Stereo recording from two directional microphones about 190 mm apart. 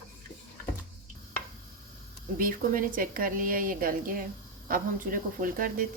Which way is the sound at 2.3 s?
45° right (ahead or behind).